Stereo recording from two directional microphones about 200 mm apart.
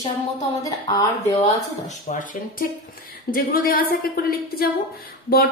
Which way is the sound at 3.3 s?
45° left (ahead or behind).